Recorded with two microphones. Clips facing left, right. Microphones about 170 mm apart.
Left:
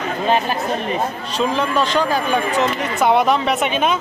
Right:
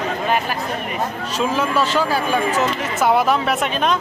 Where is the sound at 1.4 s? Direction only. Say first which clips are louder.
Left 1 dB; 5° right (ahead or behind).